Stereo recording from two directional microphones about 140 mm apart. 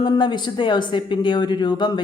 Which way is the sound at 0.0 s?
30° left (ahead or behind).